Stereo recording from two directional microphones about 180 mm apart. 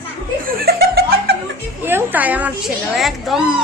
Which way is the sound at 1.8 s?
10° right (ahead or behind).